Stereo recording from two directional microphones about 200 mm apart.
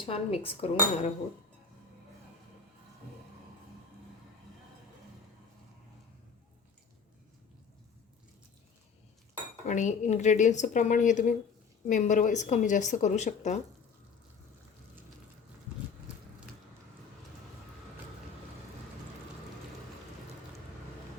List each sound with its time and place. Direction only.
0.0 s speech: 30° left (ahead or behind)
9.6 s a woman's voice: 35° left (ahead or behind)